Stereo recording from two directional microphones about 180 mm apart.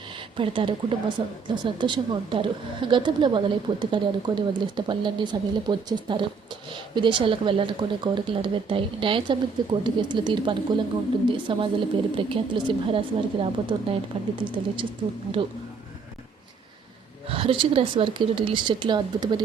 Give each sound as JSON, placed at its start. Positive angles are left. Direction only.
{"t": 0.2, "sound": "a woman's voice", "side_deg": -30}
{"t": 17.2, "sound": "a woman's voice", "side_deg": -30}